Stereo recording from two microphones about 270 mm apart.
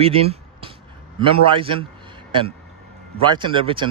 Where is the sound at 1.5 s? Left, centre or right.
Centre.